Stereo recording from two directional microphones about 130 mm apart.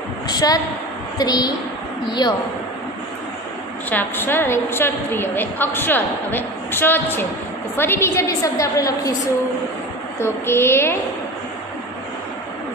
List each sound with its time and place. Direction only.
0.3 s a woman's voice: 30° left (ahead or behind)
3.9 s a woman's voice: 15° left (ahead or behind)
10.1 s a woman's voice: 20° left (ahead or behind)